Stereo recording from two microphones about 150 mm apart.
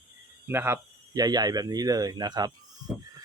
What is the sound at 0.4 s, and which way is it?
Speech, 15° right (ahead or behind).